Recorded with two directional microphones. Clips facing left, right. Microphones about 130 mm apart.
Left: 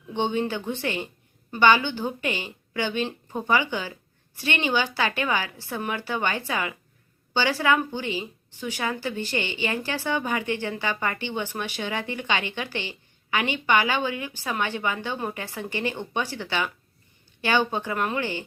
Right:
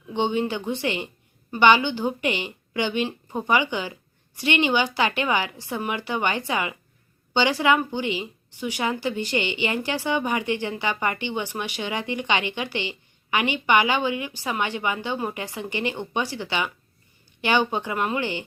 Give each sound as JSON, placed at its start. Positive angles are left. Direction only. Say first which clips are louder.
{"t": 0.1, "sound": "a woman's voice", "louder": "right 2 dB", "side_deg": -15}